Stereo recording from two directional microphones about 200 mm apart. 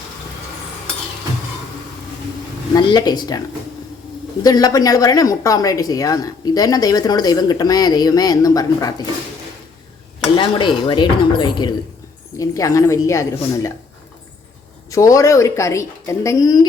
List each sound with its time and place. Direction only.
2.7 s a woman's voice: 20° left (ahead or behind)
4.4 s a woman's voice: 20° left (ahead or behind)
10.3 s a woman's voice: 25° left (ahead or behind)
14.8 s a woman's voice: 15° left (ahead or behind)